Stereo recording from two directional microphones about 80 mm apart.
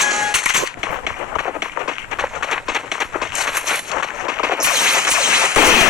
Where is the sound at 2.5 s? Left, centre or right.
Centre.